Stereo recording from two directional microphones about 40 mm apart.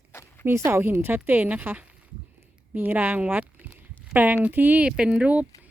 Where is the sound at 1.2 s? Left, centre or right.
Right.